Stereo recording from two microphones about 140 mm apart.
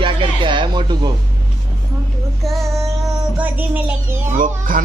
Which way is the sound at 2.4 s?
Centre (ahead or behind).